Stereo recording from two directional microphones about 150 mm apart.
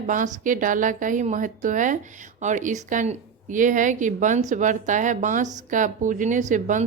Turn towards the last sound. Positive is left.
turn(degrees=-55)  # may be behind; listen again after turning